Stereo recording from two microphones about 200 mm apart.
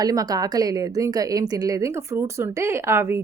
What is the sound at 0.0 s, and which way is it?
A woman's voice, 20° right (ahead or behind).